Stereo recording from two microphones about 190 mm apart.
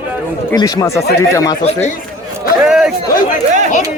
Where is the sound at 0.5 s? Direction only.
15° left (ahead or behind).